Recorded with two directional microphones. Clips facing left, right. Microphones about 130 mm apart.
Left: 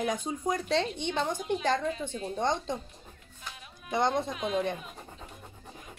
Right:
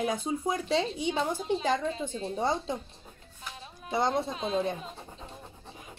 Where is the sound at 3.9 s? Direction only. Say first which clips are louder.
Even; centre (ahead or behind).